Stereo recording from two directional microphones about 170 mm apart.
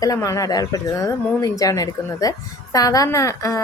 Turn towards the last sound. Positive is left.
turn(degrees=20)  # may be behind; listen again after turning